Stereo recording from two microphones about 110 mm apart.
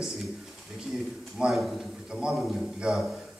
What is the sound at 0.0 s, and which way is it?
A man's voice, centre (ahead or behind).